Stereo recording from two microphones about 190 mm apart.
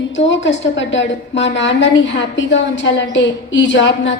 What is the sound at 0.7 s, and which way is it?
A woman's voice, 75° left (ahead or behind).